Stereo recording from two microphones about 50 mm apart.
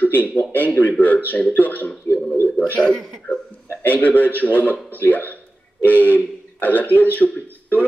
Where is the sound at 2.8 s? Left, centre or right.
Centre.